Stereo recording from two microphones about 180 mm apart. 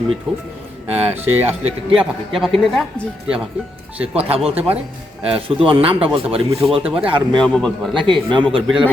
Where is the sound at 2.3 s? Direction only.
Centre (ahead or behind).